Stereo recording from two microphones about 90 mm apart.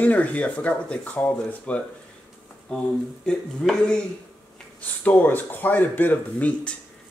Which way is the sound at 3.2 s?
5° left (ahead or behind).